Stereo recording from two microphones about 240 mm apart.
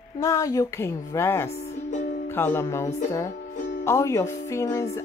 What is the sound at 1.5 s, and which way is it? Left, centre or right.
Music, left.